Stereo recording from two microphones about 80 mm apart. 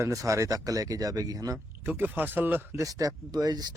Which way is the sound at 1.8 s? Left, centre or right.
Right.